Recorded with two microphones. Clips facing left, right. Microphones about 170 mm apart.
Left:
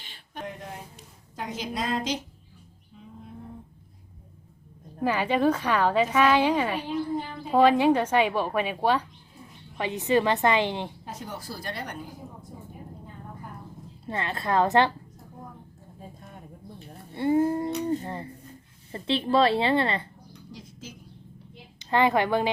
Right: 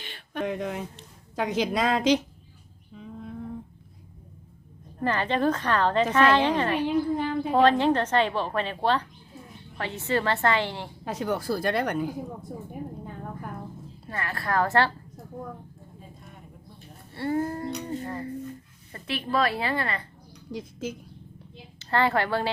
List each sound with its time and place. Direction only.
0.0 s a sound: 70° right (ahead or behind); by 0.9 s 90° right
1.4 s a woman's voice: 75° right (ahead or behind)
4.9 s a woman's voice: 10° left (ahead or behind)
11.0 s speech: 80° right
14.1 s a woman's voice: 20° left (ahead or behind)
17.2 s a woman's voice: 15° left (ahead or behind)
20.5 s speech: 50° right (ahead or behind)
21.8 s a woman's voice: 15° left (ahead or behind)